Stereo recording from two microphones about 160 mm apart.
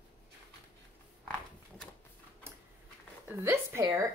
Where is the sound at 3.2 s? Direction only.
15° right (ahead or behind).